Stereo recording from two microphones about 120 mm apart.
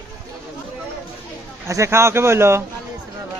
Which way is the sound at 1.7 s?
25° right (ahead or behind).